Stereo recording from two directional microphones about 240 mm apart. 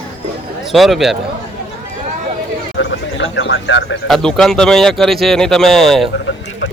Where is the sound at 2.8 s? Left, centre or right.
Left.